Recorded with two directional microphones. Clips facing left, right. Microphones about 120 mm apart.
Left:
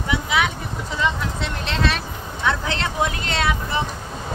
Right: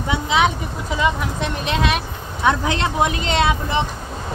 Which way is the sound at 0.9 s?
15° right (ahead or behind).